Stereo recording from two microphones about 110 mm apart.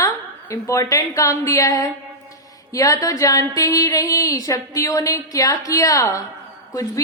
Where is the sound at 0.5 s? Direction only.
30° left (ahead or behind).